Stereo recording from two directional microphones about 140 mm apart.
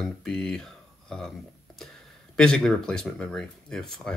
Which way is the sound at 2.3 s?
5° left (ahead or behind).